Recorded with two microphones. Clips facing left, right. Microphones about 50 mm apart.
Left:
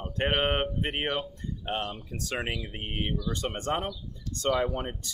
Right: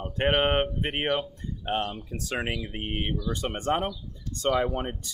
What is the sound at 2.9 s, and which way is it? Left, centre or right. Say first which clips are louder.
Speech: right 1 dB; centre.